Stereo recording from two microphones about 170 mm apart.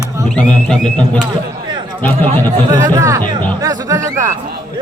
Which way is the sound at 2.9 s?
20° right (ahead or behind).